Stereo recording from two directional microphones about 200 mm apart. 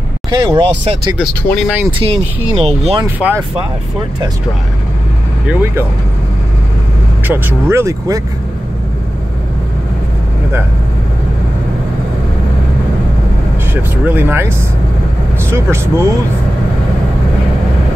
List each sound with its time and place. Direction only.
0.3 s speech: 25° right (ahead or behind)
1.1 s speech: centre (ahead or behind)
1.9 s speech: 25° right (ahead or behind)
3.2 s speech: 5° right (ahead or behind)
5.5 s speech: 10° right (ahead or behind)
7.2 s speech: 10° right (ahead or behind)
14.0 s speech: 10° right (ahead or behind)
15.5 s speech: 15° right (ahead or behind)